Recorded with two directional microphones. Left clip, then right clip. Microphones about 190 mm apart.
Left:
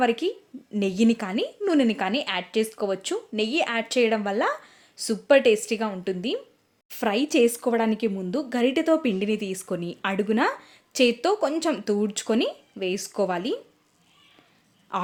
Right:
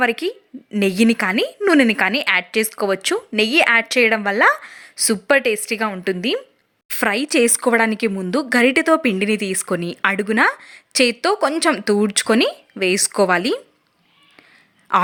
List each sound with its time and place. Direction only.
0.0 s speech: 15° right (ahead or behind)
14.9 s speech: 15° right (ahead or behind)